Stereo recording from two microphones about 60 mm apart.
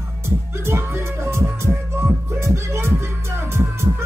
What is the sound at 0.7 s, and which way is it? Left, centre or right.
Music, right.